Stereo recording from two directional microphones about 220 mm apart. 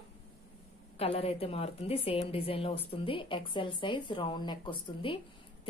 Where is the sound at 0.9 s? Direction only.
25° left (ahead or behind).